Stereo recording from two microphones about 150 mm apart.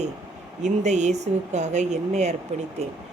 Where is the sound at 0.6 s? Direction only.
50° right (ahead or behind).